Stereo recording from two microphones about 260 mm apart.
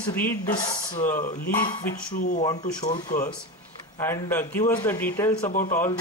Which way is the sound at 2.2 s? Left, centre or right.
Left.